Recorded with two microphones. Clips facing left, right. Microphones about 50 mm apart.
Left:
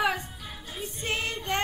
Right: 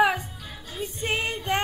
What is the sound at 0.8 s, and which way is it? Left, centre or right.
Child singing, right.